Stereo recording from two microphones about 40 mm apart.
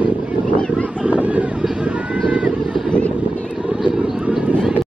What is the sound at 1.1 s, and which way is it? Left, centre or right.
Vehicle, right.